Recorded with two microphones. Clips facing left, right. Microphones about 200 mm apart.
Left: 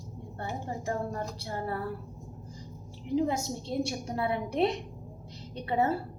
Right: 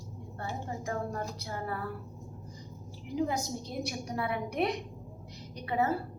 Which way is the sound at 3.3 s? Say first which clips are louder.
Left 3 dB; 25° left (ahead or behind).